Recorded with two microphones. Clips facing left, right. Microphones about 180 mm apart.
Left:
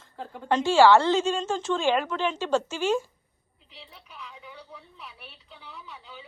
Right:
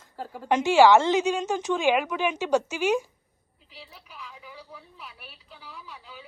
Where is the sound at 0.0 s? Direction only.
5° right (ahead or behind).